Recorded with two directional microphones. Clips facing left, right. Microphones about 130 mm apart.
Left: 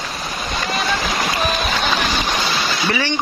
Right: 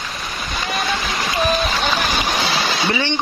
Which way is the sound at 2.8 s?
25° right (ahead or behind).